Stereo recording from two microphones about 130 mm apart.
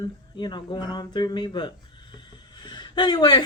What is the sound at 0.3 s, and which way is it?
A man's voice, 35° left (ahead or behind).